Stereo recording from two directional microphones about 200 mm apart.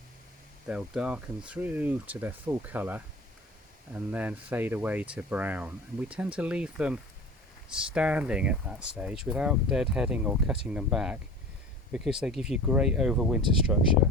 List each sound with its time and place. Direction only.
0.7 s speech: 5° right (ahead or behind)